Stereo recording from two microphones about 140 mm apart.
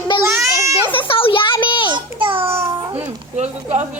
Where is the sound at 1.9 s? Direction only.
40° right (ahead or behind).